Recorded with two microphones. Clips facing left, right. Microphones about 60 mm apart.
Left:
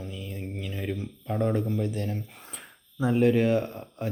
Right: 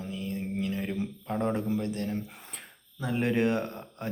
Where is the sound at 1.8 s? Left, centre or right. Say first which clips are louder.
Left 1 dB; centre.